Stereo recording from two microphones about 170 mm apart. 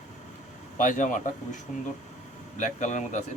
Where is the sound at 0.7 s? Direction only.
50° left (ahead or behind).